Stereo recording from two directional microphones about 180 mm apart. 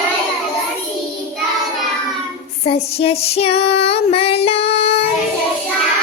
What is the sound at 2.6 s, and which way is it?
Child singing, 35° left (ahead or behind).